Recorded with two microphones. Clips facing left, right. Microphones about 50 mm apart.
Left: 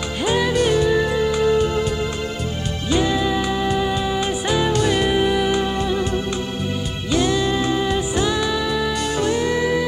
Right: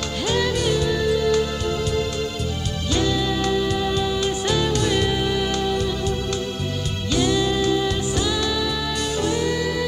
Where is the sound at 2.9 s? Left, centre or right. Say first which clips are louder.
Left 3 dB; centre.